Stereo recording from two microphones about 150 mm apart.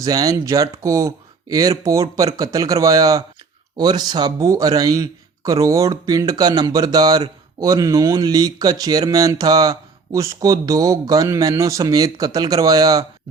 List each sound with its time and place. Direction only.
0.0 s speech: 25° right (ahead or behind)